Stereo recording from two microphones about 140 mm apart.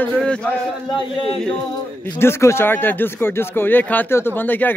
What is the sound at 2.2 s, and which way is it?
Speech, 20° left (ahead or behind).